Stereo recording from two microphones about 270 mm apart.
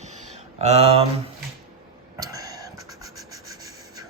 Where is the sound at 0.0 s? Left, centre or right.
Right.